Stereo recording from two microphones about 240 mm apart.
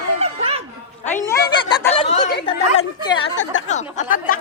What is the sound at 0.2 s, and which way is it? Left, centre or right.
Chatter, right.